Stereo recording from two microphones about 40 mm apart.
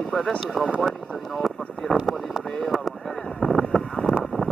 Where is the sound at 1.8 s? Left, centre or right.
Left.